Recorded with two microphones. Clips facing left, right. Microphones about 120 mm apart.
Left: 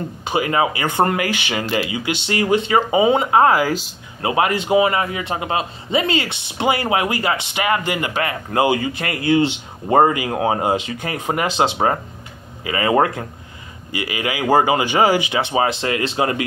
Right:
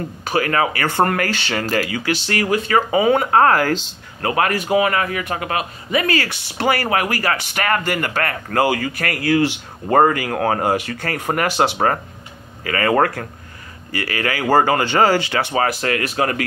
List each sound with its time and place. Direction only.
0.2 s speech: 20° left (ahead or behind)